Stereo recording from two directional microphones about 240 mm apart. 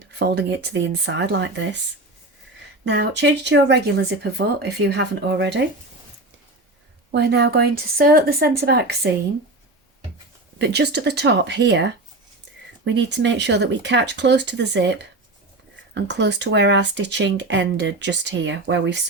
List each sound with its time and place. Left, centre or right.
0.2 s speech: right
2.8 s speech: right
7.1 s speech: right
10.6 s speech: right
16.0 s speech: right